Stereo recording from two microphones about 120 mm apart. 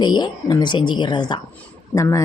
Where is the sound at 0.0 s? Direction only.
35° left (ahead or behind).